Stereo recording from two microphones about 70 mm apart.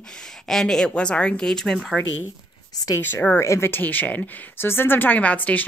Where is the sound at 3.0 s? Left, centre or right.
Left.